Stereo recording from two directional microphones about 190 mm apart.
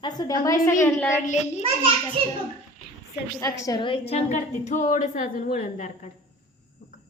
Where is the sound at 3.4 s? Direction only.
15° left (ahead or behind); by 6.1 s 40° left (ahead or behind).